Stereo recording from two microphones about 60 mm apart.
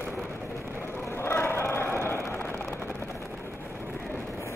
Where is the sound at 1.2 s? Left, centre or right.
Left.